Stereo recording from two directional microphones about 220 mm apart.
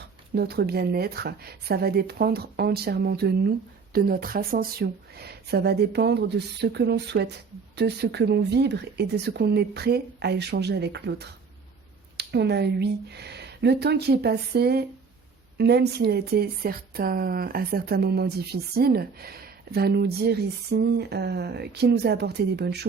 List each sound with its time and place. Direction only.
0.3 s speech: 45° right (ahead or behind)